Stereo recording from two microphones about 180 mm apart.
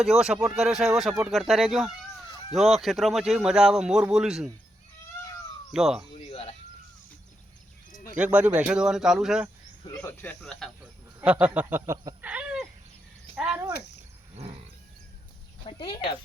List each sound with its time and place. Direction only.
0.0 s a man's voice: 5° right (ahead or behind)
5.7 s a man's voice: 5° right (ahead or behind)
6.1 s a sound: 35° left (ahead or behind)
8.1 s a man's voice: 5° right (ahead or behind)
9.8 s a man's voice: 15° left (ahead or behind); by 13.7 s 5° right (ahead or behind)
15.6 s speech: 30° left (ahead or behind)